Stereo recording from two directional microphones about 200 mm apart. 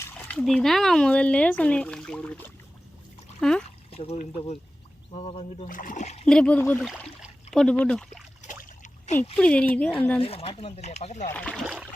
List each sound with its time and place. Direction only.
0.0 s speech: 10° left (ahead or behind)
3.4 s speech: centre (ahead or behind)
3.9 s speech: 30° left (ahead or behind)
5.6 s speech: 40° left (ahead or behind)
6.2 s speech: 5° left (ahead or behind)
8.8 s splash: 35° left (ahead or behind)
9.3 s speech: 5° left (ahead or behind)
10.2 s speech: 30° left (ahead or behind)
11.3 s speech: 5° left (ahead or behind)
11.6 s a sound: 5° right (ahead or behind)